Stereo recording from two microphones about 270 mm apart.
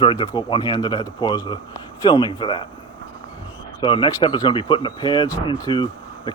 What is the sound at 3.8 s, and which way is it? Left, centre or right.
Speech, centre.